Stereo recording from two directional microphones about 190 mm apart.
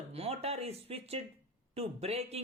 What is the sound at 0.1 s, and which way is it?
Speech, 30° right (ahead or behind).